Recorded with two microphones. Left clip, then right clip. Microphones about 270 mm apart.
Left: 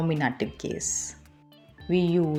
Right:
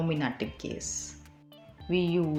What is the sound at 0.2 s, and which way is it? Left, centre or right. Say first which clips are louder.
Speech: left 5 dB; left.